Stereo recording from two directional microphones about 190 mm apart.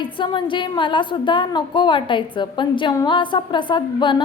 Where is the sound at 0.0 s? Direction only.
25° left (ahead or behind).